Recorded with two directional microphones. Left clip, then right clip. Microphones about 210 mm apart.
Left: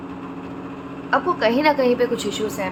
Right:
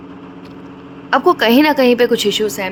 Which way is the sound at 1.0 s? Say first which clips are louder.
Right 7 dB; 55° right (ahead or behind).